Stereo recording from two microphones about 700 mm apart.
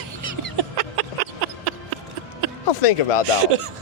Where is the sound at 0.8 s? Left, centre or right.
Right.